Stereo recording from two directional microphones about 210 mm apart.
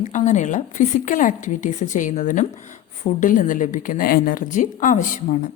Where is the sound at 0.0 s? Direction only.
35° left (ahead or behind).